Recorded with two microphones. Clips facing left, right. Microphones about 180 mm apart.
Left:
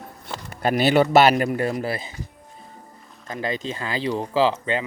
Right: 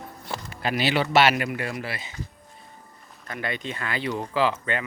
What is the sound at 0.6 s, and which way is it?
Speech, 45° left (ahead or behind).